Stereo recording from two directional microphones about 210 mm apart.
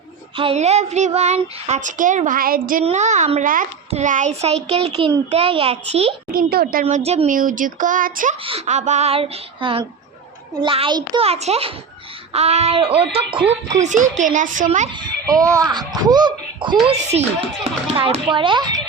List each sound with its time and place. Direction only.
0.3 s a child's voice: 30° right (ahead or behind)
6.3 s a woman's voice: 45° right (ahead or behind)
6.8 s a child's voice: 30° right (ahead or behind)
15.3 s a child's voice: 15° right (ahead or behind)